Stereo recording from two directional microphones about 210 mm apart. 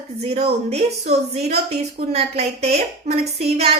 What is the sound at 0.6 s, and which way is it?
A woman's voice, 30° right (ahead or behind).